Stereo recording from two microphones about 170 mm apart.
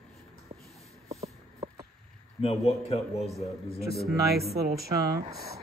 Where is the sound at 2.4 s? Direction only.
35° left (ahead or behind).